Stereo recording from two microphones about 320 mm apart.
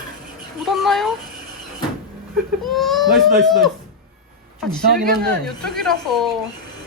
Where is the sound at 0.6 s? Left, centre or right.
Centre.